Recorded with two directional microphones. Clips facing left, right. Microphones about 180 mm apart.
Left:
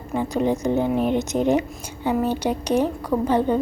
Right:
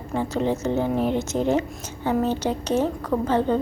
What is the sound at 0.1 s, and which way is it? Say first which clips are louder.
A woman's voice: left 2 dB; 15° left (ahead or behind).